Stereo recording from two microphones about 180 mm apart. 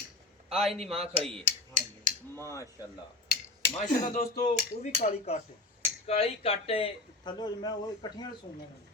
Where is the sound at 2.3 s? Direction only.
15° left (ahead or behind).